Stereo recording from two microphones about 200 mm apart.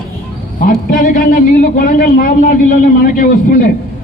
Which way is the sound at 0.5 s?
45° left (ahead or behind).